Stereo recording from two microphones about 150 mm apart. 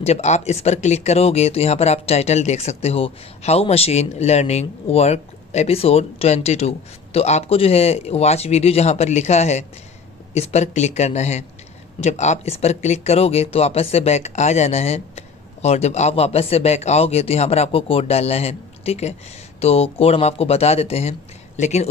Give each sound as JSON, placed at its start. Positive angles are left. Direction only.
{"t": 0.0, "sound": "speech", "side_deg": 45}